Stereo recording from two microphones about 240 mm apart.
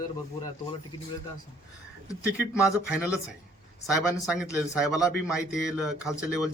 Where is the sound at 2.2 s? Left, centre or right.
Centre.